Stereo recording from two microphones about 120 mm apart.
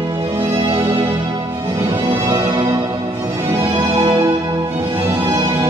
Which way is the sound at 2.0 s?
40° right (ahead or behind).